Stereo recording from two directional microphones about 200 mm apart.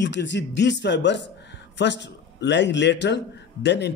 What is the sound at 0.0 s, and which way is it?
Speech, 60° left (ahead or behind).